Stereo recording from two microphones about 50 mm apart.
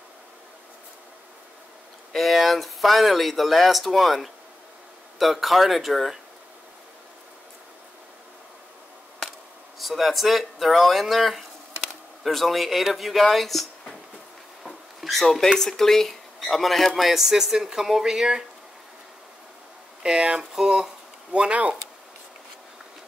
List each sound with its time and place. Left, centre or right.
2.1 s speech: centre
9.8 s speech: centre
14.6 s a sound: centre
15.6 s speech: centre
20.0 s speech: centre